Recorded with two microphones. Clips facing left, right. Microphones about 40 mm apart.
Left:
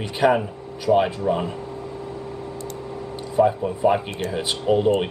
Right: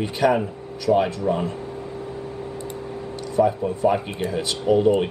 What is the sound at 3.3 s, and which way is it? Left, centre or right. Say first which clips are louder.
Speech: left 1 dB; left.